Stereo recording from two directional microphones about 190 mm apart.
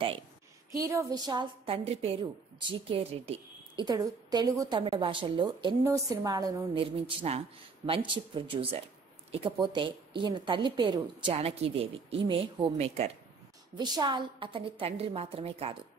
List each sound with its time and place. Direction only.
0.7 s a woman's voice: 15° right (ahead or behind); by 13.1 s 35° right (ahead or behind)
13.7 s a woman's voice: 25° right (ahead or behind)